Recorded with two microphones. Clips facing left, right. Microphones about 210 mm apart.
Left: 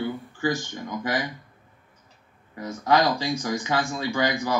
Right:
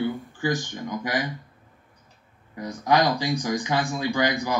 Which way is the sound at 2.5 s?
15° right (ahead or behind).